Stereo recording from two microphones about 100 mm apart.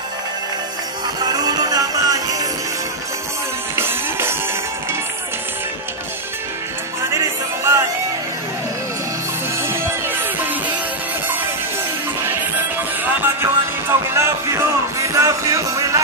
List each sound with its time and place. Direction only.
1.2 s music: 40° right (ahead or behind)
3.7 s music: 25° right (ahead or behind)
7.0 s music: 30° right (ahead or behind)
9.6 s music: 20° right (ahead or behind)
13.2 s music: 25° right (ahead or behind)